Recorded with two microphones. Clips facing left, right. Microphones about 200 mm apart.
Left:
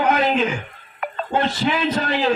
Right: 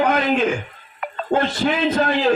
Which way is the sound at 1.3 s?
55° right (ahead or behind).